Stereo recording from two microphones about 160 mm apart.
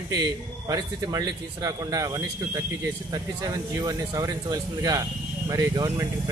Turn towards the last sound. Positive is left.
turn(degrees=-25)  # may be behind; listen again after turning